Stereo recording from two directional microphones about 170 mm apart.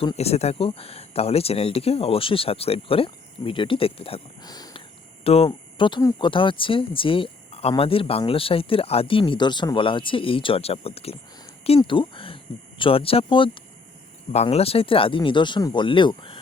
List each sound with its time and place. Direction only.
0.0 s speech: 35° left (ahead or behind)
4.4 s a sound: 25° left (ahead or behind)
5.2 s speech: 35° left (ahead or behind)